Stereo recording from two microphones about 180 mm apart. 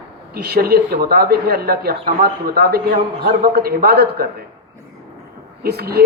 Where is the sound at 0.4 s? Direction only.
60° right (ahead or behind).